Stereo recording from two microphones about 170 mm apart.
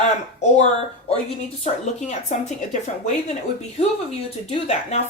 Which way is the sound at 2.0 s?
45° left (ahead or behind).